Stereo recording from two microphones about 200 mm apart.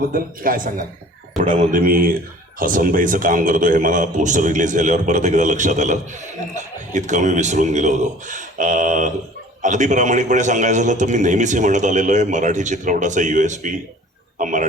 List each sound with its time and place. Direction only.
0.1 s a man's voice: 45° right (ahead or behind)